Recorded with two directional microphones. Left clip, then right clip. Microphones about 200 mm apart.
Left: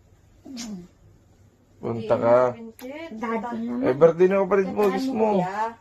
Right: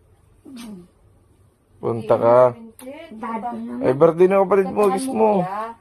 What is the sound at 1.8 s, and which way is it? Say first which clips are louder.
Speech: right 5 dB; 55° right (ahead or behind).